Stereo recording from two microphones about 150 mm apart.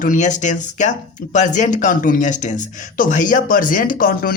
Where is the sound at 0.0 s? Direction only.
55° left (ahead or behind).